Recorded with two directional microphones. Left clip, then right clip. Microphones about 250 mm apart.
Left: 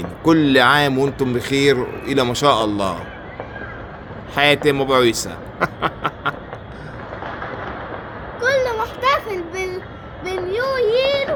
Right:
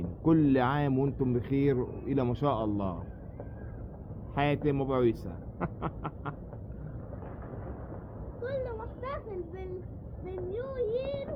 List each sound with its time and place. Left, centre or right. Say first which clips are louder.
0.3 s speech: left 13 dB; centre
4.4 s speech: left 14 dB; centre
8.4 s a sound: left 18 dB; left
10.2 s child singing: left 16 dB; left